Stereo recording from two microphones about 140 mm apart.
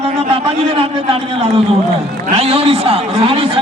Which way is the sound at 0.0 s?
40° right (ahead or behind).